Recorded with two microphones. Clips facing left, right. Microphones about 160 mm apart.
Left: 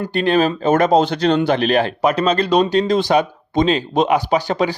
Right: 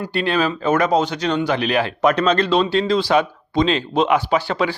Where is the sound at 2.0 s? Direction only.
35° left (ahead or behind).